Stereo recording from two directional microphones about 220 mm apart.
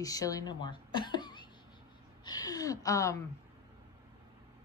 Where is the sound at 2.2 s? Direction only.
15° left (ahead or behind).